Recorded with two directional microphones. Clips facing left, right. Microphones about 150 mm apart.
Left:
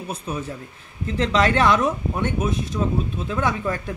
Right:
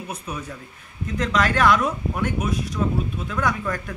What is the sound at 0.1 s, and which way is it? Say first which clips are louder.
A man's voice: left 5 dB; 30° left (ahead or behind).